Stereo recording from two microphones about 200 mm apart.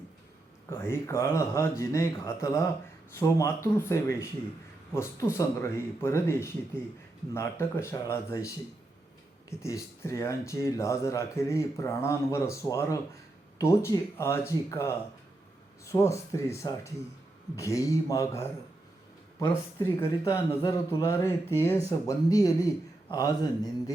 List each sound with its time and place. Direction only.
0.7 s speech: 10° left (ahead or behind)